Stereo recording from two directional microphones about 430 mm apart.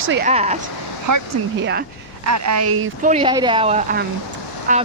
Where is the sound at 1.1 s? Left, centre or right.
Right.